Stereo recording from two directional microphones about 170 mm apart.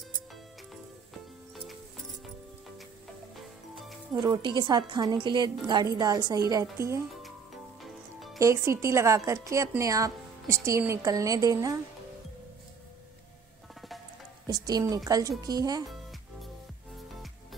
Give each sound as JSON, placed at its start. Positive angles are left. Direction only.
{"t": 4.1, "sound": "a woman's voice", "side_deg": -25}
{"t": 7.8, "sound": "music", "side_deg": 0}
{"t": 8.4, "sound": "a woman's voice", "side_deg": -15}
{"t": 14.5, "sound": "a woman's voice", "side_deg": -20}